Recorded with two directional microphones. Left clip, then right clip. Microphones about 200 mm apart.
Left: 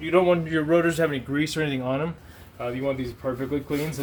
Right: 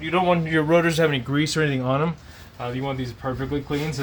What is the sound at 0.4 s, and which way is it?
Speech, 45° right (ahead or behind).